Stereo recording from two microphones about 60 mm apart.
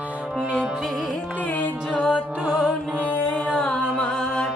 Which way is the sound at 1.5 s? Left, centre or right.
Left.